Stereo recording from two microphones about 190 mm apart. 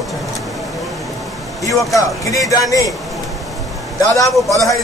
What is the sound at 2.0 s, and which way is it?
Speech, 15° left (ahead or behind).